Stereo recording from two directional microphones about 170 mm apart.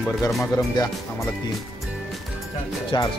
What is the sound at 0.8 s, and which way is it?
Speech, 25° left (ahead or behind).